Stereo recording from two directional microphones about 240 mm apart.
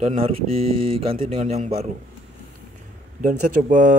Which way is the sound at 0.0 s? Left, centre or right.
Right.